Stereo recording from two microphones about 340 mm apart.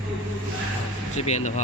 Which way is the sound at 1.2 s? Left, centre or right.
Centre.